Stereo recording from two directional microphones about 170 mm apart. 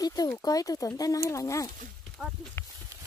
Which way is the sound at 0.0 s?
20° left (ahead or behind).